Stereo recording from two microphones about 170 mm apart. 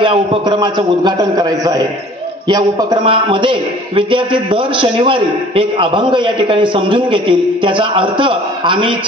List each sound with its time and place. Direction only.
0.0 s a man's voice: 30° right (ahead or behind)